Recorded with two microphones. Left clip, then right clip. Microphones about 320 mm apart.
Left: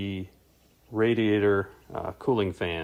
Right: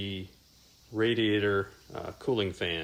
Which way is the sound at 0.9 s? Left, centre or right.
Centre.